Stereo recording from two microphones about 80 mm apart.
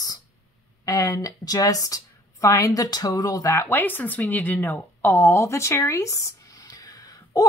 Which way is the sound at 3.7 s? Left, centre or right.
Left.